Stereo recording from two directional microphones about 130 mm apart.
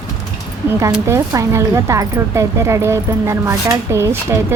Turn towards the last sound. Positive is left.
turn(degrees=-20)  # may be behind; listen again after turning